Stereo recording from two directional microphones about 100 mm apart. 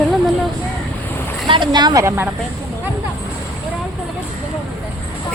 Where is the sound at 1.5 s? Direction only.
50° right (ahead or behind).